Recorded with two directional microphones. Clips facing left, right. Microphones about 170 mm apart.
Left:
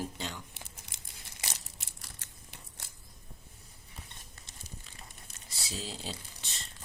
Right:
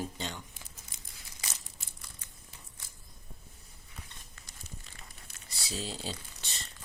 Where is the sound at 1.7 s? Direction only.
75° left (ahead or behind).